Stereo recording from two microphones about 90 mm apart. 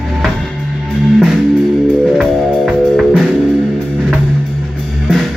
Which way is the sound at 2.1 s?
Centre (ahead or behind).